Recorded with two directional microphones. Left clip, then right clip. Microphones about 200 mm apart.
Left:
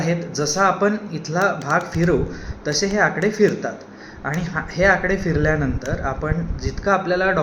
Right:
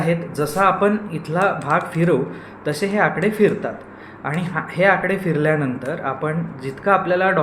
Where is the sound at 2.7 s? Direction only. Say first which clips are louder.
Even; 15° right (ahead or behind).